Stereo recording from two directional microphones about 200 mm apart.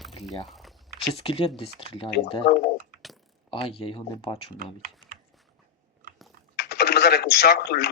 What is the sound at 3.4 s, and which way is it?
Speech, 25° left (ahead or behind).